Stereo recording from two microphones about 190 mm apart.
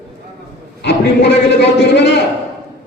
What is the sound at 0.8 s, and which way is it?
A man's voice, 65° left (ahead or behind).